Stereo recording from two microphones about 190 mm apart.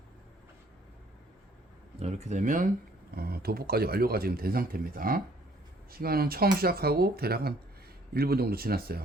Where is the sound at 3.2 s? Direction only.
55° right (ahead or behind).